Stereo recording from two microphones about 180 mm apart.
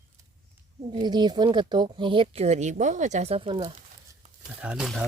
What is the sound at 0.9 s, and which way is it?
Speech, 25° right (ahead or behind).